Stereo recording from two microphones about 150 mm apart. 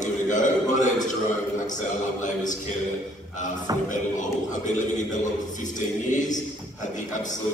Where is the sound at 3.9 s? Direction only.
55° left (ahead or behind).